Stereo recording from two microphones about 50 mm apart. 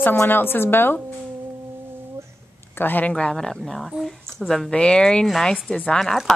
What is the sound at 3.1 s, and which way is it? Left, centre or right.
Speech, centre.